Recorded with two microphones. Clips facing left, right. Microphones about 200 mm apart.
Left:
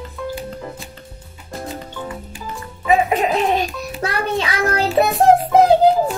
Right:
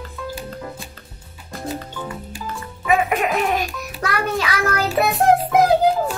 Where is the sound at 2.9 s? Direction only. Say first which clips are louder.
Left 3 dB; 30° left (ahead or behind).